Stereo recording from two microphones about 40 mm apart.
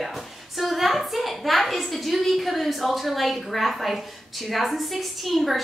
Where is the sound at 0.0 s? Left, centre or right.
Centre.